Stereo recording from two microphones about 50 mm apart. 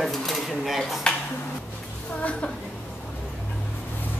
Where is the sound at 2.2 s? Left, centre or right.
Left.